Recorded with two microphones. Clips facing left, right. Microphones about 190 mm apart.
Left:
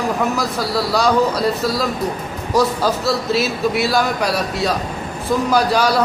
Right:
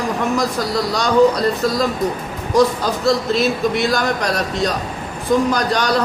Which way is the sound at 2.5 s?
5° left (ahead or behind).